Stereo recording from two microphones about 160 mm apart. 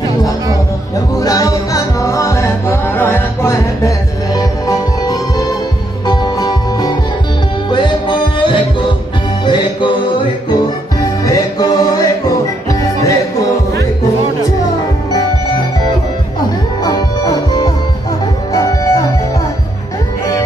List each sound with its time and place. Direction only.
1.2 s music: 20° left (ahead or behind)
11.0 s music: 20° left (ahead or behind)
16.8 s music: 25° left (ahead or behind)